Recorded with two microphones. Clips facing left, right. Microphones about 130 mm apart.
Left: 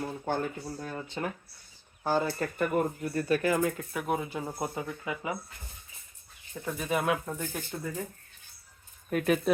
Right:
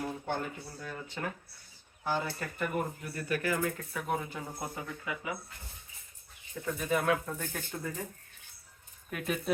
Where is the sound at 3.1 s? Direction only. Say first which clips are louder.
Left 5 dB; 25° left (ahead or behind).